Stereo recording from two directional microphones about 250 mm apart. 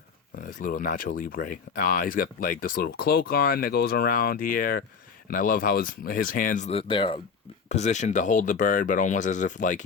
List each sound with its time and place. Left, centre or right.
0.3 s speech: left